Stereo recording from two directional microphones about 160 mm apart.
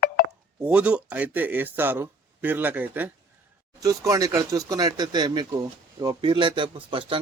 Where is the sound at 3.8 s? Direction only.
20° right (ahead or behind).